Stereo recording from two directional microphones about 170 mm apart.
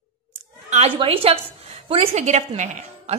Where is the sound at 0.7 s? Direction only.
35° right (ahead or behind).